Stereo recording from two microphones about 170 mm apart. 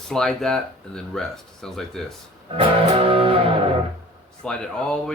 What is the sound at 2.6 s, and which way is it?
Music, 30° right (ahead or behind).